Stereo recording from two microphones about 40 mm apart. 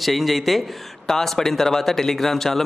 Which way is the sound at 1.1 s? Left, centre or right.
Centre.